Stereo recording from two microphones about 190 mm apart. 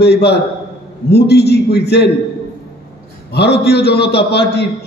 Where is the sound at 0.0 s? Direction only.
60° left (ahead or behind).